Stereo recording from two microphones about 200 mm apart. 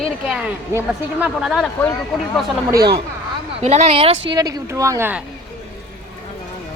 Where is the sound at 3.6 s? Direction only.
30° right (ahead or behind).